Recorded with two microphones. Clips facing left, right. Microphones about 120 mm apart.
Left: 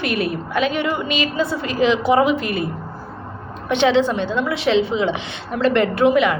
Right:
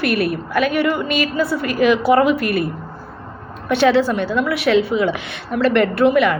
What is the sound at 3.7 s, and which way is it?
A woman's voice, 20° left (ahead or behind).